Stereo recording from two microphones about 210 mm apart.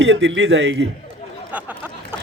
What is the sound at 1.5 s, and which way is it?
Speech, 10° right (ahead or behind).